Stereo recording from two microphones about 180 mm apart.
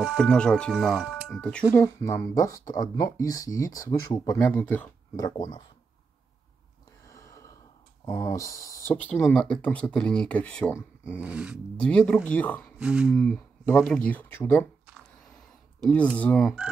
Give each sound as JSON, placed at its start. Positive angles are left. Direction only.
{"t": 0.0, "sound": "speech", "side_deg": 0}
{"t": 1.8, "sound": "speech", "side_deg": 15}
{"t": 5.1, "sound": "speech", "side_deg": 20}
{"t": 7.1, "sound": "gasp", "side_deg": 15}
{"t": 8.0, "sound": "speech", "side_deg": 15}
{"t": 11.1, "sound": "speech", "side_deg": -5}
{"t": 12.0, "sound": "speech", "side_deg": 5}
{"t": 12.7, "sound": "speech", "side_deg": -5}
{"t": 14.9, "sound": "a sound", "side_deg": 0}
{"t": 15.8, "sound": "speech", "side_deg": 5}